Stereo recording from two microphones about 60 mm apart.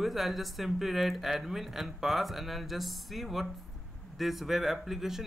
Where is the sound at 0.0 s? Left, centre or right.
Centre.